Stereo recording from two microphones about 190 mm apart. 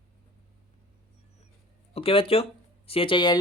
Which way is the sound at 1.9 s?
30° left (ahead or behind).